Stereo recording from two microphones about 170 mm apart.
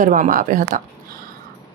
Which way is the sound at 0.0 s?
50° right (ahead or behind).